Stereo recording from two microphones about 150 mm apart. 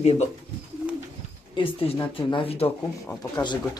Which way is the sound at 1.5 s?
35° left (ahead or behind).